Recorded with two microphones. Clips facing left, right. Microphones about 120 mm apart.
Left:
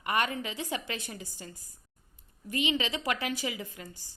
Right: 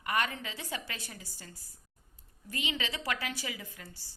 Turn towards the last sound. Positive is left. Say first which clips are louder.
# left 6 dB
turn(degrees=15)  # may be behind; listen again after turning